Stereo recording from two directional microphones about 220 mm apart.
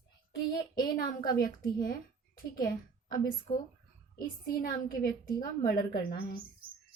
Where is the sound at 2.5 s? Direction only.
40° left (ahead or behind).